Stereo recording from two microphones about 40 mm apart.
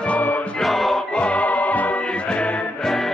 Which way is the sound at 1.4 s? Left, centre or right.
Left.